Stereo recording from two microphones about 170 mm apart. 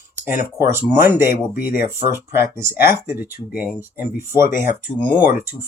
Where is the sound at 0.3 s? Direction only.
15° right (ahead or behind).